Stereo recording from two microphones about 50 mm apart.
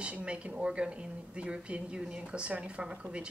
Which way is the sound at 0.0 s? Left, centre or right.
Right.